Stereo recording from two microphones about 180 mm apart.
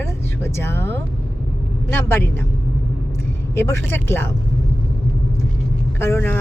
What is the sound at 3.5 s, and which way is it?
Speech, 15° left (ahead or behind).